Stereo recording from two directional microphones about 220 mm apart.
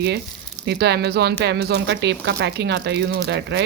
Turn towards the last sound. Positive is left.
turn(degrees=-50)  # may be behind; listen again after turning